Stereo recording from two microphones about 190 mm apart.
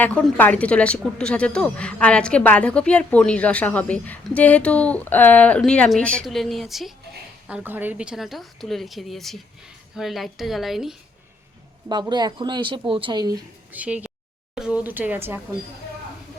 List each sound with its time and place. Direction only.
0.0 s a woman's voice: 10° left (ahead or behind)
11.9 s speech: 20° right (ahead or behind)
13.7 s speech: 5° right (ahead or behind)